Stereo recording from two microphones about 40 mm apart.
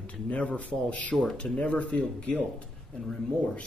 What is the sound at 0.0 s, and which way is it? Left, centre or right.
A man's voice, left.